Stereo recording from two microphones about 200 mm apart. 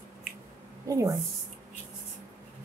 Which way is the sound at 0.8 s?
15° right (ahead or behind).